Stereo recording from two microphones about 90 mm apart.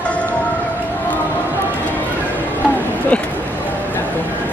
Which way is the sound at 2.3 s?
20° left (ahead or behind).